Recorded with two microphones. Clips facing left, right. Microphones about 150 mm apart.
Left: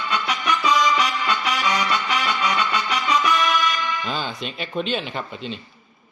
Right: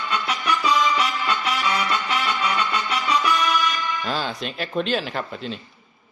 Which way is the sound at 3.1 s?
Centre (ahead or behind).